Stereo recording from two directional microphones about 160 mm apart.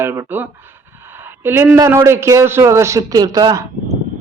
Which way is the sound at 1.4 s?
15° right (ahead or behind).